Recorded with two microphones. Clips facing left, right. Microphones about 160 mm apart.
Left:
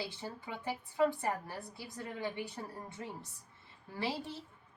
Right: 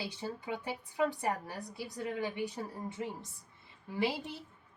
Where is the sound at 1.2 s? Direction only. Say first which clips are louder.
Right 2 dB; 15° right (ahead or behind).